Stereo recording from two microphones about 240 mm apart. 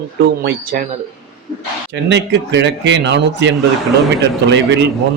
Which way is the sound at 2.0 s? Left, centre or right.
Right.